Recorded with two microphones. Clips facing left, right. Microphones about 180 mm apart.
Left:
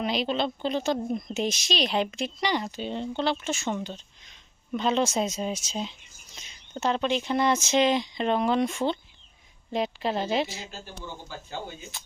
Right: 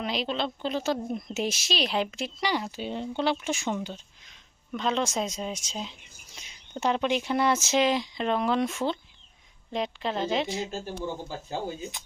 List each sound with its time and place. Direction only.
0.0 s speech: centre (ahead or behind)
6.3 s speech: 10° right (ahead or behind); by 10.6 s 5° left (ahead or behind)
10.7 s speech: 45° right (ahead or behind)